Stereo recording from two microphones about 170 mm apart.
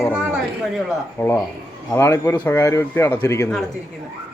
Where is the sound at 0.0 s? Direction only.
5° right (ahead or behind).